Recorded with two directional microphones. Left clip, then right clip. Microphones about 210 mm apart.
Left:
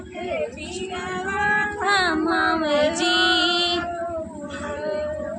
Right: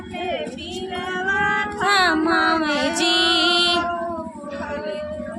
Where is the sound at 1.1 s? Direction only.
30° right (ahead or behind).